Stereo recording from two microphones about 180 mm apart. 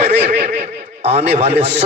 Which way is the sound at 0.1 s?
35° right (ahead or behind).